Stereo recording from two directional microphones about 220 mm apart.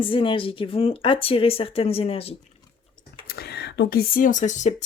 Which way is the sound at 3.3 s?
45° left (ahead or behind).